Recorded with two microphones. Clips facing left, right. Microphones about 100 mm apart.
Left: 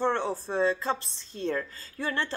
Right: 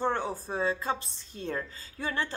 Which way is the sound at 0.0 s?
15° right (ahead or behind).